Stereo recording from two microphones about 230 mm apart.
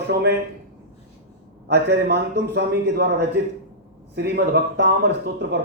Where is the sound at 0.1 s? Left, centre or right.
Right.